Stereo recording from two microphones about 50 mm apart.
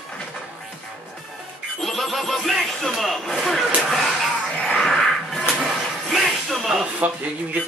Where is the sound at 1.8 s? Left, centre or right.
Centre.